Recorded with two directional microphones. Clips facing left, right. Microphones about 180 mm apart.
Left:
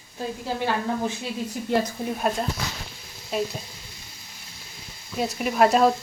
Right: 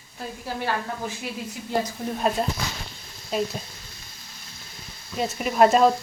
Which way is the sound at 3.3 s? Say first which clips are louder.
Right 1 dB; centre (ahead or behind).